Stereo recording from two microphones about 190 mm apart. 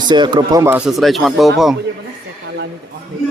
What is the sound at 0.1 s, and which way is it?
Speech, 25° right (ahead or behind).